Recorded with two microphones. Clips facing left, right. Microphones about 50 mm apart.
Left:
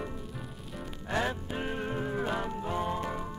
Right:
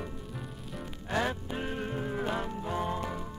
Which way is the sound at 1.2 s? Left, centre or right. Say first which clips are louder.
Even; centre.